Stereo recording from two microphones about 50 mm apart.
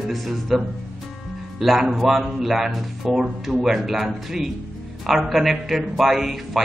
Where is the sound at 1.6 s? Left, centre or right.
Centre.